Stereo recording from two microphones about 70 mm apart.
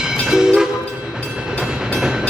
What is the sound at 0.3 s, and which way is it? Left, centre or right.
Train, centre.